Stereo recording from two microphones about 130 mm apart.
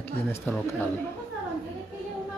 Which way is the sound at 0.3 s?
15° left (ahead or behind).